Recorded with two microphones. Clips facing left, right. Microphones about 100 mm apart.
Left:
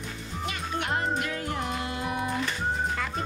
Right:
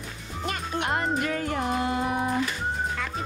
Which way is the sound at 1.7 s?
45° right (ahead or behind).